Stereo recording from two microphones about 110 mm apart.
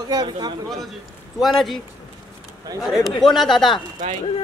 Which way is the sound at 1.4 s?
Centre (ahead or behind).